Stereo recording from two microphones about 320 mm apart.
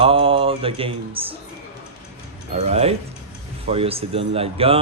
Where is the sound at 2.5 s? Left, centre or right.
Centre.